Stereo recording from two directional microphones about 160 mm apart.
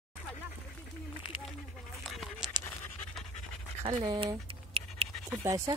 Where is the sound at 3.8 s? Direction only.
40° right (ahead or behind).